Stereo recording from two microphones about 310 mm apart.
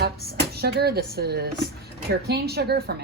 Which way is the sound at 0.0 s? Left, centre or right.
Right.